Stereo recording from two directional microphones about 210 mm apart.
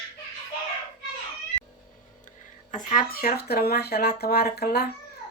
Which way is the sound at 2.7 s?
40° left (ahead or behind).